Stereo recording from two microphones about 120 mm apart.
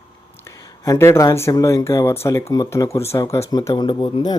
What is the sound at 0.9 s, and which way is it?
Speech, 20° left (ahead or behind).